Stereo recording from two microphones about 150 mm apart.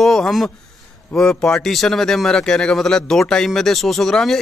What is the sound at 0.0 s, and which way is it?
Speech, centre (ahead or behind).